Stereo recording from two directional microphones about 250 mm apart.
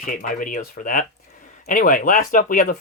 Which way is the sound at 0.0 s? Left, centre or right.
Left.